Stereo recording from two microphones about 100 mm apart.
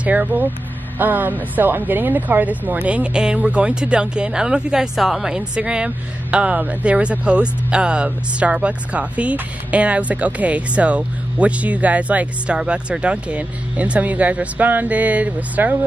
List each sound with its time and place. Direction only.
0.0 s speech: 15° right (ahead or behind)